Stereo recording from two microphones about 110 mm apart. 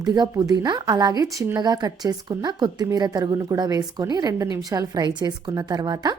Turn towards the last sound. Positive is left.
turn(degrees=-40)  # may be behind; listen again after turning